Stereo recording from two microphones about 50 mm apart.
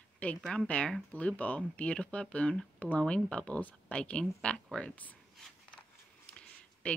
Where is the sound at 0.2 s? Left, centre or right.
Left.